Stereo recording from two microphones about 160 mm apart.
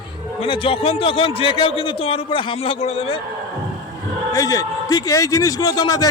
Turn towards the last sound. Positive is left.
turn(degrees=25)  # may be behind; listen again after turning